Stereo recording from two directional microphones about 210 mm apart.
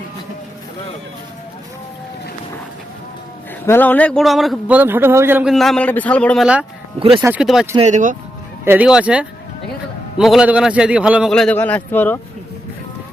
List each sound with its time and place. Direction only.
3.7 s a man's voice: 10° left (ahead or behind)
7.8 s speech: 35° right (ahead or behind)
8.6 s a man's voice: 10° right (ahead or behind); by 12.2 s 10° left (ahead or behind)